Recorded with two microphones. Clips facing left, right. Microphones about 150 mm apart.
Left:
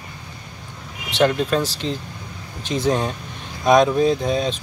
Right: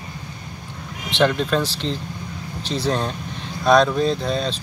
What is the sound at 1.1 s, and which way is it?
Speech, 40° left (ahead or behind).